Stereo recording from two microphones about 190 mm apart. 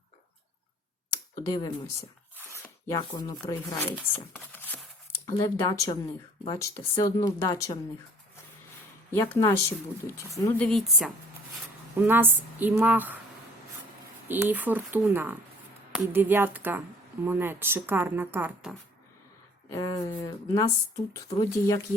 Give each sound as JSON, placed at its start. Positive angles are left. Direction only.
{"t": 1.5, "sound": "speech", "side_deg": 20}
{"t": 2.5, "sound": "a sound", "side_deg": 15}
{"t": 3.4, "sound": "speech", "side_deg": 15}
{"t": 4.5, "sound": "a sound", "side_deg": 10}
{"t": 5.3, "sound": "speech", "side_deg": 15}
{"t": 9.1, "sound": "speech", "side_deg": 15}
{"t": 11.9, "sound": "speech", "side_deg": -10}
{"t": 14.3, "sound": "speech", "side_deg": -10}
{"t": 19.7, "sound": "speech", "side_deg": 20}